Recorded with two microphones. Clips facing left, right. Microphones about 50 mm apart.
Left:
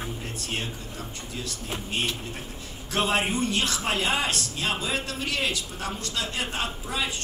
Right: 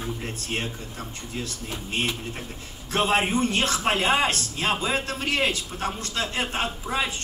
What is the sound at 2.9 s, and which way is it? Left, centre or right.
A man's voice, right.